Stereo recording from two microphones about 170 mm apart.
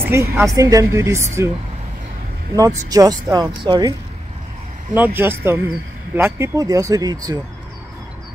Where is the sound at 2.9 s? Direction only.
20° right (ahead or behind).